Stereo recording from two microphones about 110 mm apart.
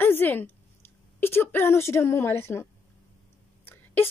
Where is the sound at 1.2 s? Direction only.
20° left (ahead or behind).